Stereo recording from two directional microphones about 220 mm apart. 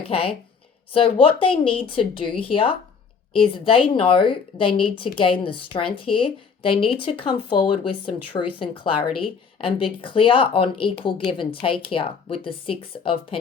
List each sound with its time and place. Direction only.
0.0 s speech: 25° left (ahead or behind)